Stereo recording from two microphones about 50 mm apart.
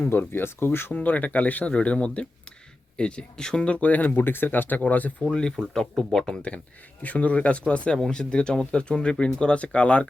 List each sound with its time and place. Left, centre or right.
0.0 s speech: left
0.9 s speech: left
4.1 s speech: left
5.3 s speech: centre
7.0 s speech: left